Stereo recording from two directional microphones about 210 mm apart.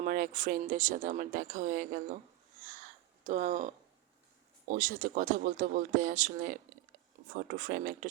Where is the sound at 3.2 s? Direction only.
35° right (ahead or behind).